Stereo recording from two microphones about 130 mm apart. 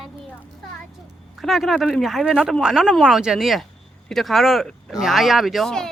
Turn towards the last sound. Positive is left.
turn(degrees=5)  # may be behind; listen again after turning